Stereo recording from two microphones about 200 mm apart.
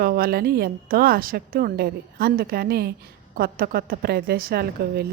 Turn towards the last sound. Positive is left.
turn(degrees=-50)  # may be behind; listen again after turning